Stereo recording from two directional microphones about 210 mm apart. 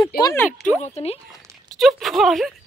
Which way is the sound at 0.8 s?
30° left (ahead or behind).